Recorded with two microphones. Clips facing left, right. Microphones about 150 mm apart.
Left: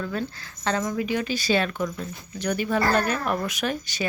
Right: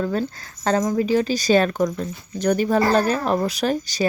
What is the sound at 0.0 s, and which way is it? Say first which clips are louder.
Speech: right 6 dB; 35° right (ahead or behind).